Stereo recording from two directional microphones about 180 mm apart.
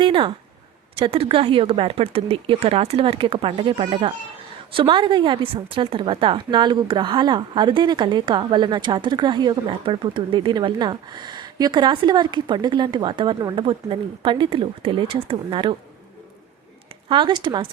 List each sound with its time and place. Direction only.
0.0 s a woman's voice: 30° right (ahead or behind)
17.1 s a woman's voice: 25° right (ahead or behind)